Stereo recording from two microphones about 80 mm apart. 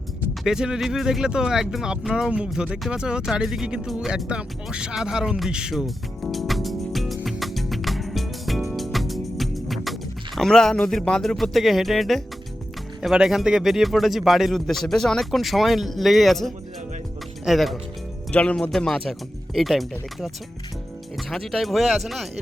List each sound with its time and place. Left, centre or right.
0.4 s speech: centre
7.3 s music: centre
13.0 s speech: centre
18.3 s speech: centre
21.2 s speech: centre